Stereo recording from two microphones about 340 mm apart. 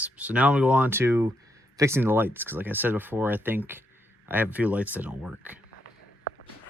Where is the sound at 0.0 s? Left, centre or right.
Centre.